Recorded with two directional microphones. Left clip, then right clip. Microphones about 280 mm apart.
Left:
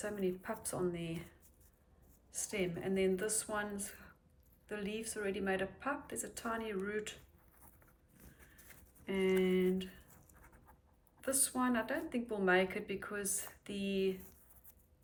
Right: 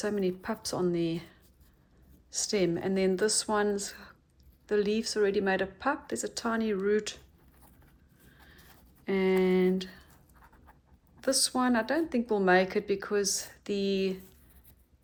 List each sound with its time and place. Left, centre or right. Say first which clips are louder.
0.0 s speech: right 8 dB; centre
2.3 s speech: right 11 dB; centre
9.0 s speech: right 7 dB; centre
11.2 s speech: right 9 dB; centre